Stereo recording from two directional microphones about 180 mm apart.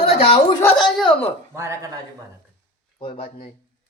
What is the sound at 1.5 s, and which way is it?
Speech, 15° right (ahead or behind).